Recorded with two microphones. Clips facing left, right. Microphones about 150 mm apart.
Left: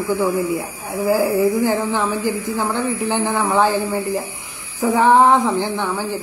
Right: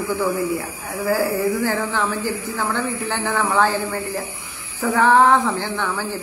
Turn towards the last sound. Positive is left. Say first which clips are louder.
# left 3 dB
turn(degrees=15)  # may be behind; listen again after turning